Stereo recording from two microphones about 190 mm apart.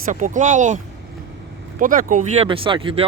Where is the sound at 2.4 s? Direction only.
25° right (ahead or behind).